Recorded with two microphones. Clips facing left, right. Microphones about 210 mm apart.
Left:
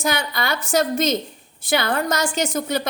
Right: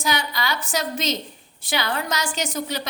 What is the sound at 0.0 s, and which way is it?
A woman's voice, 50° left (ahead or behind).